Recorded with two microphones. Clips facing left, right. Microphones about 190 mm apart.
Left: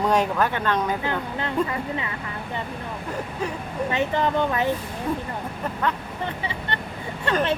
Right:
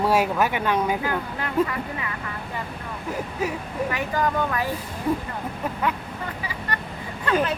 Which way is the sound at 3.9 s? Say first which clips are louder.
Left 3 dB; 25° left (ahead or behind).